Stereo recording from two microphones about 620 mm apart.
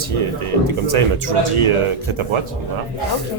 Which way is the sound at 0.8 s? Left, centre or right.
Right.